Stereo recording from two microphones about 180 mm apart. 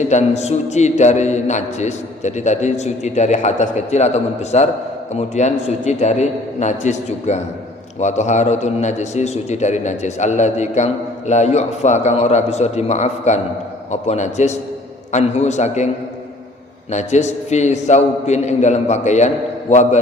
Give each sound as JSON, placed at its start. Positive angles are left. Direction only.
{"t": 0.1, "sound": "a man's voice", "side_deg": 40}
{"t": 16.9, "sound": "a man's voice", "side_deg": 40}